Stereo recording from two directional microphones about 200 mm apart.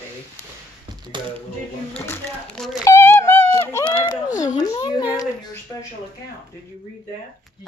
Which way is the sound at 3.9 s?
25° left (ahead or behind).